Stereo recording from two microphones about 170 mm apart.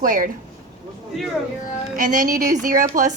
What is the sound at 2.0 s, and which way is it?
Speech, 50° right (ahead or behind).